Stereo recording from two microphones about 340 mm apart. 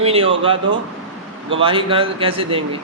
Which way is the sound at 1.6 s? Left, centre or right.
Centre.